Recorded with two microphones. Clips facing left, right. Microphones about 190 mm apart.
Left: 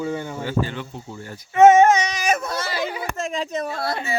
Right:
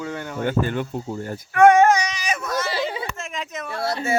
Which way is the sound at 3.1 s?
35° left (ahead or behind).